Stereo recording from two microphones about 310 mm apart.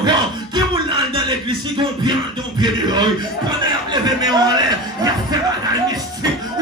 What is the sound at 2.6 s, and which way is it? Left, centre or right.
A man's voice, centre.